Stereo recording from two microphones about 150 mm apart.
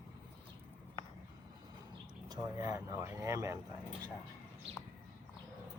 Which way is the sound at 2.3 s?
20° right (ahead or behind).